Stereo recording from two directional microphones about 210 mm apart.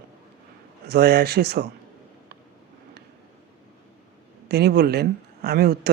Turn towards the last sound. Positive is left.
turn(degrees=-50)  # may be behind; listen again after turning